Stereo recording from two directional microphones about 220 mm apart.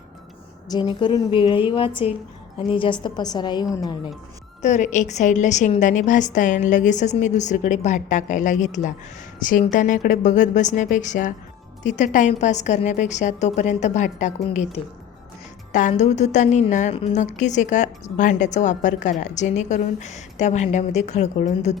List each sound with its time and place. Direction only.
0.7 s a woman's voice: 20° left (ahead or behind)
4.6 s a woman's voice: 30° left (ahead or behind)